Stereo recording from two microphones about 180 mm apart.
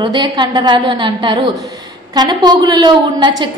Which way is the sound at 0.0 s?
25° right (ahead or behind).